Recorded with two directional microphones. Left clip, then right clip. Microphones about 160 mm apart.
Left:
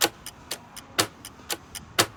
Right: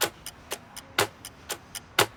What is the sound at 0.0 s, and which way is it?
Clock, centre (ahead or behind).